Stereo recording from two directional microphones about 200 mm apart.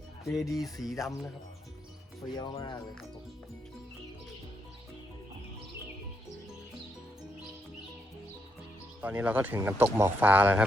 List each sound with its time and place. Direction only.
0.3 s speech: centre (ahead or behind)
2.3 s speech: 20° left (ahead or behind)
9.0 s speech: 10° right (ahead or behind)